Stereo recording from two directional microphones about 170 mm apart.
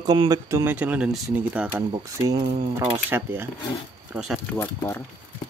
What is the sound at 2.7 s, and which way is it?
Speech, 15° right (ahead or behind).